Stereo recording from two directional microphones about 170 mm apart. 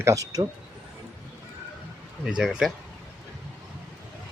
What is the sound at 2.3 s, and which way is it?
Speech, 5° right (ahead or behind).